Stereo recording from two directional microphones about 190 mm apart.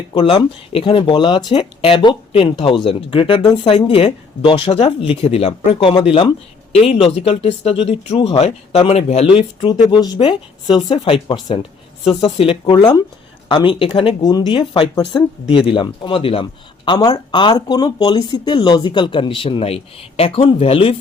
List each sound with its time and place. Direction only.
0.1 s a man's voice: 30° left (ahead or behind)